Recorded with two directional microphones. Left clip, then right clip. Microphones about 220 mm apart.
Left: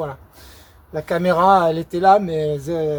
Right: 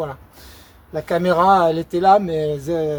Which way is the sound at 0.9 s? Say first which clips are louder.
Even; 20° left (ahead or behind).